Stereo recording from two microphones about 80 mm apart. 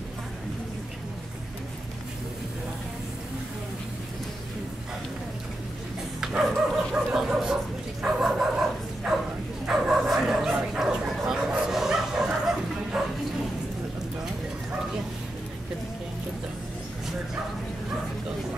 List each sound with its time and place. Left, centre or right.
6.2 s dog: centre
7.2 s bow-wow: centre
8.0 s fowl: centre
9.7 s bow-wow: centre